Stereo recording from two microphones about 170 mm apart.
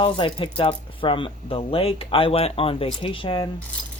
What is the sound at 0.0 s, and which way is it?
Speech, 30° left (ahead or behind).